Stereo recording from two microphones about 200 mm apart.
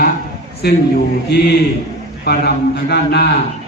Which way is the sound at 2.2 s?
55° left (ahead or behind).